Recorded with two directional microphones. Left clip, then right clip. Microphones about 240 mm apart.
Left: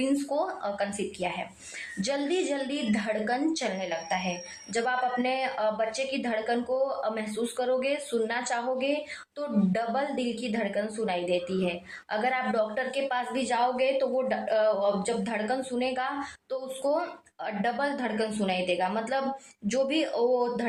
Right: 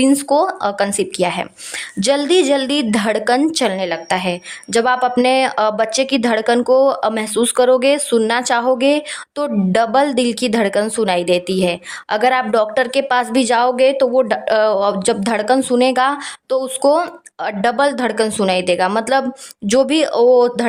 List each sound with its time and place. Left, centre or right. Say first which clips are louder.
0.0 s a woman's voice: right 14 dB; right